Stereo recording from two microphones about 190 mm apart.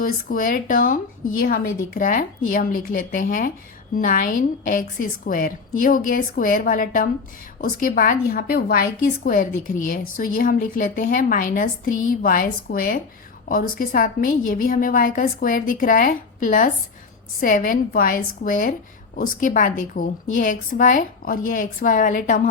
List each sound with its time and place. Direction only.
0.0 s speech: 45° left (ahead or behind)